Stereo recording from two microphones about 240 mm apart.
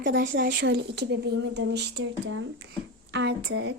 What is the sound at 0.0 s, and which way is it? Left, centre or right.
Speech, right.